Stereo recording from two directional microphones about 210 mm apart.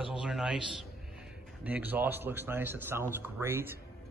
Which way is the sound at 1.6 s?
10° right (ahead or behind).